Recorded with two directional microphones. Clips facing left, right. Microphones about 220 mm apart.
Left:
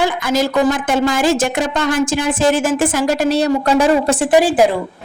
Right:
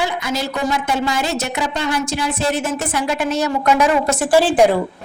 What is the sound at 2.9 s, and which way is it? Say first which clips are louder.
Speech: left 5 dB; 40° left (ahead or behind).